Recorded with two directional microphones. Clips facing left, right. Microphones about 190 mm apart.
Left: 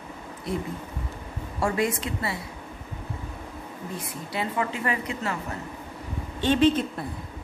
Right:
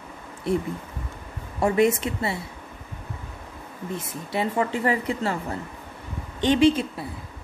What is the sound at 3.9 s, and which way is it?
Speech, 25° right (ahead or behind).